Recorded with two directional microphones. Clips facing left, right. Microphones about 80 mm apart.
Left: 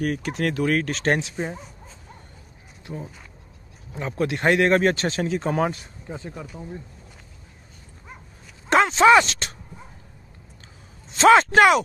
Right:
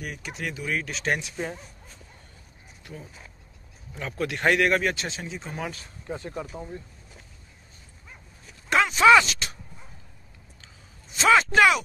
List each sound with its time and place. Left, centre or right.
0.0 s speech: left
0.5 s speech: left
0.7 s speech: left
2.9 s speech: left
5.2 s speech: left
6.4 s speech: centre
8.6 s speech: left
11.2 s speech: left